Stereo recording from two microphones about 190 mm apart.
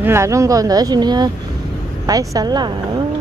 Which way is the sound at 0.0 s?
15° right (ahead or behind).